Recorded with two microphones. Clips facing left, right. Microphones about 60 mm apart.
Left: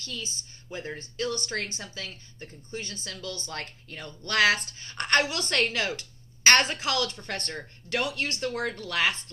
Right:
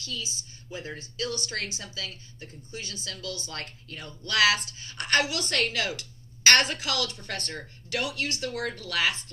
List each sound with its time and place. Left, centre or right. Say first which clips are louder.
0.0 s a woman's voice: right 1 dB; left